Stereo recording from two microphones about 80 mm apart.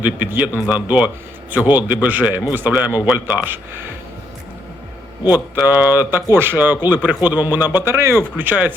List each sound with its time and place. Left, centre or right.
0.0 s a man's voice: right
5.5 s a man's voice: right
7.8 s speech: right
8.4 s a man's voice: right